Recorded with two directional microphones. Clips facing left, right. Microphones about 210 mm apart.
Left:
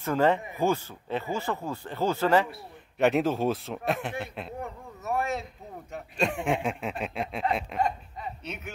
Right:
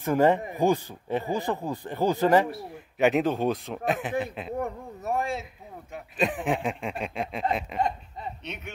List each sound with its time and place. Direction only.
0.0 s speech: 15° right (ahead or behind)
3.0 s speech: centre (ahead or behind)
5.0 s a sound: 30° right (ahead or behind)
5.9 s speech: centre (ahead or behind)